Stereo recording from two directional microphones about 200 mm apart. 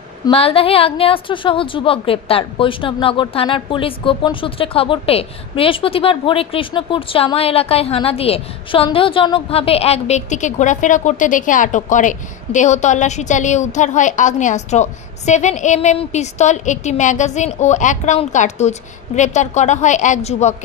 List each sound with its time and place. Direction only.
0.3 s a woman's voice: 30° left (ahead or behind)